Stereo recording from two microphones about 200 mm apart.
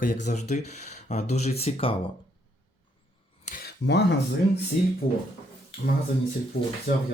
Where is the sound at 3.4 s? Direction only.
45° left (ahead or behind).